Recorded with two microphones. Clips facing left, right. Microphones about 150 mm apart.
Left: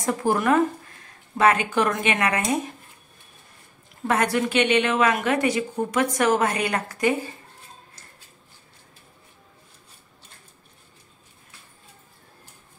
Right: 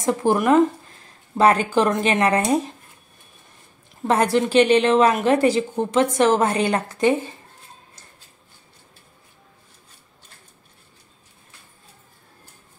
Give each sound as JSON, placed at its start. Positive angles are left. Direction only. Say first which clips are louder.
{"t": 0.0, "sound": "a woman's voice", "louder": "right 3 dB", "side_deg": -20}
{"t": 1.4, "sound": "speech", "louder": "right 3 dB", "side_deg": -35}
{"t": 4.1, "sound": "a woman's voice", "louder": "right 4 dB", "side_deg": -30}